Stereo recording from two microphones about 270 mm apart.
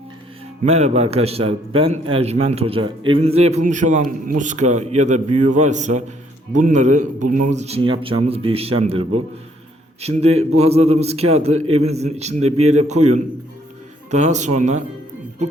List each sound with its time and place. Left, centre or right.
0.6 s a man's voice: right
14.1 s a man's voice: right